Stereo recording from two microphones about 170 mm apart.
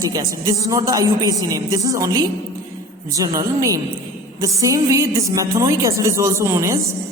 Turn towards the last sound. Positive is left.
turn(degrees=-15)  # may be behind; listen again after turning